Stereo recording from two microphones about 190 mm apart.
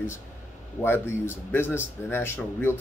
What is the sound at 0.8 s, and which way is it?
Speech, 10° left (ahead or behind).